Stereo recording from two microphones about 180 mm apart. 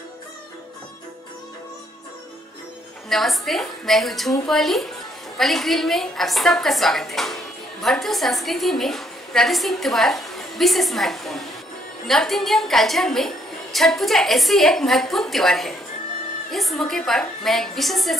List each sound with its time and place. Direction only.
3.1 s a woman's voice: centre (ahead or behind)